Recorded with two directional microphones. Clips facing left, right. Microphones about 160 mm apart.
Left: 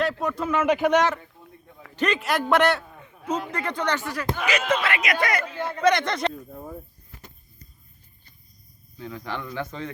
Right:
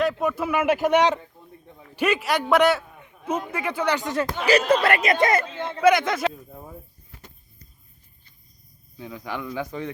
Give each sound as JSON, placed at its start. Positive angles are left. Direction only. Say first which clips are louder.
{"t": 0.0, "sound": "a man's voice", "louder": "right 2 dB", "side_deg": 0}
{"t": 3.0, "sound": "a sound", "louder": "right 1 dB", "side_deg": -10}
{"t": 3.5, "sound": "speech", "louder": "right 2 dB", "side_deg": -10}
{"t": 4.4, "sound": "speech", "louder": "right 6 dB", "side_deg": -35}
{"t": 5.0, "sound": "speech", "louder": "right 5 dB", "side_deg": -25}
{"t": 5.8, "sound": "a man's voice", "louder": "right 3 dB", "side_deg": -5}
{"t": 9.0, "sound": "speech", "louder": "right 1 dB", "side_deg": -15}